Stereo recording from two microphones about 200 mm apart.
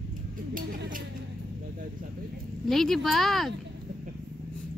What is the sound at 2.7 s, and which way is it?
Speech, centre (ahead or behind).